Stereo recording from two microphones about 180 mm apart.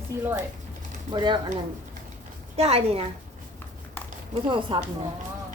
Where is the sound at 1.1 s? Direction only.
25° right (ahead or behind).